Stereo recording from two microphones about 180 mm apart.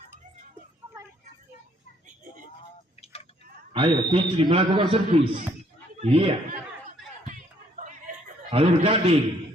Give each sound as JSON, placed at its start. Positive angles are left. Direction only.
{"t": 3.0, "sound": "a sound", "side_deg": 35}
{"t": 3.7, "sound": "a man's voice", "side_deg": -30}
{"t": 5.0, "sound": "a man's voice", "side_deg": -40}
{"t": 7.8, "sound": "chatter", "side_deg": -45}
{"t": 8.4, "sound": "a man's voice", "side_deg": -35}